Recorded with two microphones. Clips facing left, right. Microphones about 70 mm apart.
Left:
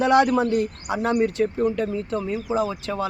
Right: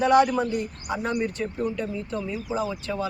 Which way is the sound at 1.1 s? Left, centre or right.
Left.